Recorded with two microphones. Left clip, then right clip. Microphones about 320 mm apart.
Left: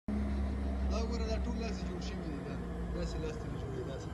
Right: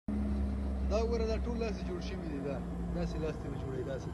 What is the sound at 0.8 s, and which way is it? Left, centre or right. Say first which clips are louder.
Speech: right 7 dB; centre.